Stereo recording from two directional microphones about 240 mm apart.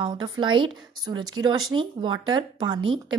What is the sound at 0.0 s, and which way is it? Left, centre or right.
A woman's voice, centre.